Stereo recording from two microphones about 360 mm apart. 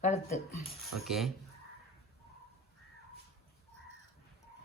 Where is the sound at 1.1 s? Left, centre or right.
Centre.